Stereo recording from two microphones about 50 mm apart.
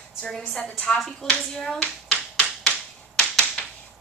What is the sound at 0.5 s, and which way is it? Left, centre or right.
Speech, left.